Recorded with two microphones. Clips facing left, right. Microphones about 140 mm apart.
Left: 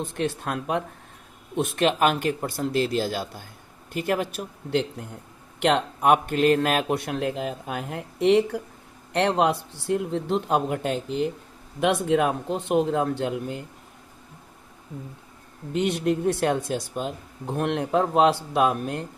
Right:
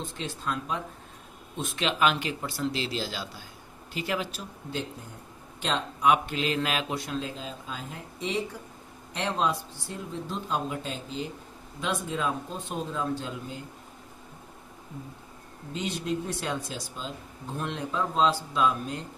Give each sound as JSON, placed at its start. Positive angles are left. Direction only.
{"t": 0.0, "sound": "speech", "side_deg": 60}
{"t": 15.7, "sound": "speech", "side_deg": 65}